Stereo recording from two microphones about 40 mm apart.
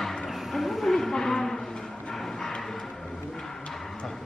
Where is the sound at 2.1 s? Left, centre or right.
Centre.